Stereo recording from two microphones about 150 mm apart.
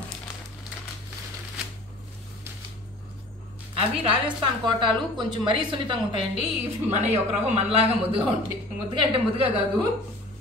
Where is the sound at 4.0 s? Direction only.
35° right (ahead or behind).